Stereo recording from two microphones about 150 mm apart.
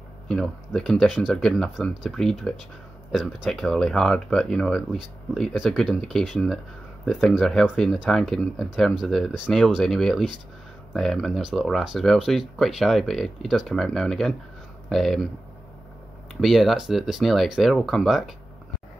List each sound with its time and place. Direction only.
0.3 s speech: 5° left (ahead or behind)
16.3 s speech: centre (ahead or behind)